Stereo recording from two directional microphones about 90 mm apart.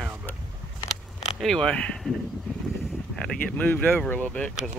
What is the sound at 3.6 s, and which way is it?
Speech, 20° left (ahead or behind).